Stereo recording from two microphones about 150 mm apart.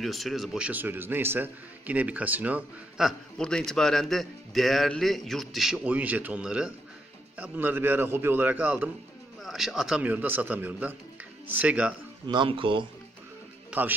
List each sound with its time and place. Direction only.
0.0 s a man's voice: centre (ahead or behind)
12.3 s speech: 35° right (ahead or behind)
13.7 s speech: 10° right (ahead or behind)